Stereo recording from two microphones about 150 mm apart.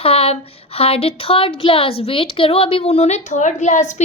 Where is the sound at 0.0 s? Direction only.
40° left (ahead or behind).